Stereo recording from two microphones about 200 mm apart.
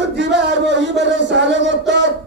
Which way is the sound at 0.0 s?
60° right (ahead or behind).